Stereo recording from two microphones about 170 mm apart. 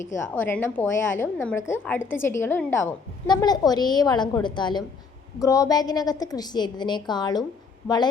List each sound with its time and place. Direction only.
0.0 s a woman's voice: 15° left (ahead or behind)
3.2 s a woman's voice: 25° left (ahead or behind)